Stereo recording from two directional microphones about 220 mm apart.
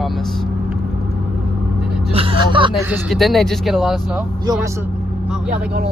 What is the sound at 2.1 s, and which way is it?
Speech, 25° right (ahead or behind).